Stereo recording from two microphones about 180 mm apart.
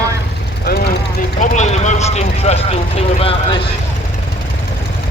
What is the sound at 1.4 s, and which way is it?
Speech, 40° left (ahead or behind).